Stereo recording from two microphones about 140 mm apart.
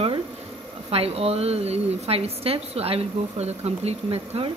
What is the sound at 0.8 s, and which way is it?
Speech, 45° right (ahead or behind).